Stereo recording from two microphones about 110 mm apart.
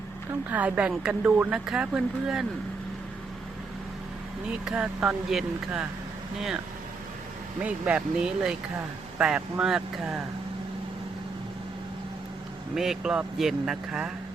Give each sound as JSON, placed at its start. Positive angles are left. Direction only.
{"t": 0.3, "sound": "a woman's voice", "side_deg": -15}
{"t": 4.6, "sound": "a woman's voice", "side_deg": -10}
{"t": 7.6, "sound": "a woman's voice", "side_deg": -10}
{"t": 12.7, "sound": "a woman's voice", "side_deg": -5}